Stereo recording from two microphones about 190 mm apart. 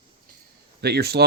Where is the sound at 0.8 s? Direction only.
60° right (ahead or behind).